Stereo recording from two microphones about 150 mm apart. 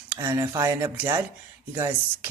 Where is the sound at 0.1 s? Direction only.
15° right (ahead or behind).